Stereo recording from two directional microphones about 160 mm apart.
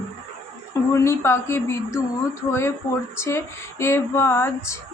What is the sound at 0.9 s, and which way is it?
Speech, 15° left (ahead or behind).